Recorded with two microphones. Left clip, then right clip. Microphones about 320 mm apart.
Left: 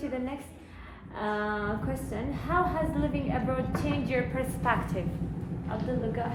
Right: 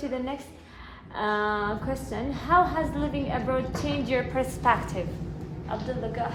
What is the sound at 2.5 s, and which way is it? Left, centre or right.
A woman's voice, right.